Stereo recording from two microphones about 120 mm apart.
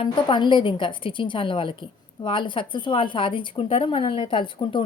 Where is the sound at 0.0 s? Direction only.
45° left (ahead or behind).